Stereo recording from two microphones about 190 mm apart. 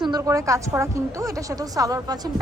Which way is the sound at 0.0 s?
20° right (ahead or behind).